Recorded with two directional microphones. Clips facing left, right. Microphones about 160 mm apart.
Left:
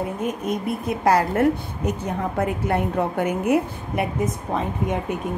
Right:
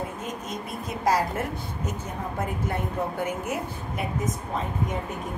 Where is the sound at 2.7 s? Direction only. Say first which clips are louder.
Left 7 dB; 65° left (ahead or behind).